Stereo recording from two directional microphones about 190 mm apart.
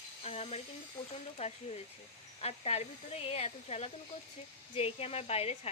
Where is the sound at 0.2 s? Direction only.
35° left (ahead or behind).